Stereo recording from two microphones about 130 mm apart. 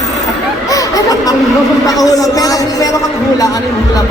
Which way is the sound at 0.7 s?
25° left (ahead or behind).